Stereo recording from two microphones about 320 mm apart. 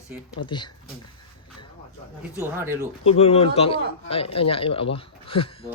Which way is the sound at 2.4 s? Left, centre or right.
Centre.